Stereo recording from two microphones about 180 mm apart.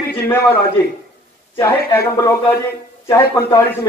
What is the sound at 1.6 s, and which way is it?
Speech, 15° left (ahead or behind).